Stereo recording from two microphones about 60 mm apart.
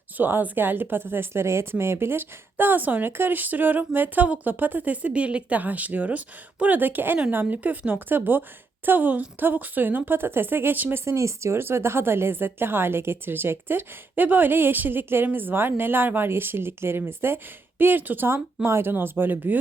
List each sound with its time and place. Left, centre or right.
0.2 s a woman's voice: right
11.0 s a woman's voice: right